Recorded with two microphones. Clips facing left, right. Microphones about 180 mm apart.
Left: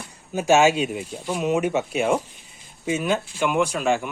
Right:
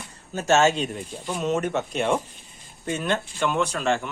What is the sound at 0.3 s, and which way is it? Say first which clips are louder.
Speech: left 3 dB; 10° left (ahead or behind).